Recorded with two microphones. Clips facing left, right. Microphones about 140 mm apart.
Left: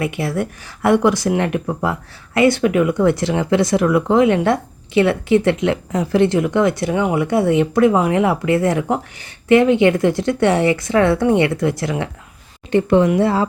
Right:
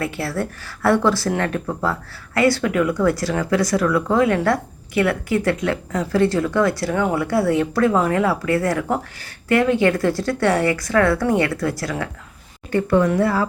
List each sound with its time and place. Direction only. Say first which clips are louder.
0.0 s speech: left 3 dB; 15° left (ahead or behind)